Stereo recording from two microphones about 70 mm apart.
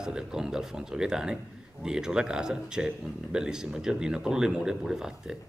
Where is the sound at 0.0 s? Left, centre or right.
Centre.